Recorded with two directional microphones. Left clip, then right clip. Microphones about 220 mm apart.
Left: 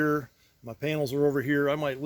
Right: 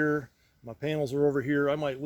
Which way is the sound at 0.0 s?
25° left (ahead or behind).